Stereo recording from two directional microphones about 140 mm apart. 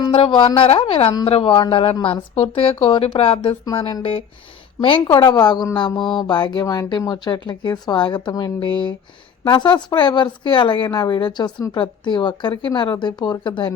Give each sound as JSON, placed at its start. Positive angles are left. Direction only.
{"t": 0.1, "sound": "a woman's voice", "side_deg": 40}